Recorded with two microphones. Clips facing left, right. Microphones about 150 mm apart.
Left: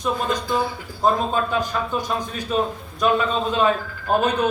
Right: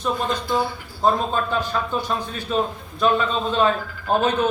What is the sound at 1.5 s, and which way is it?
A man's voice, 15° left (ahead or behind).